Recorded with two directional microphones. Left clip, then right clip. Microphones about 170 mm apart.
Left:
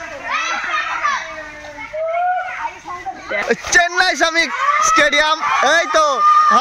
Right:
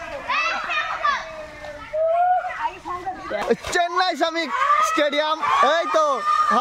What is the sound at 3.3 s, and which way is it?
A man's voice, 5° right (ahead or behind).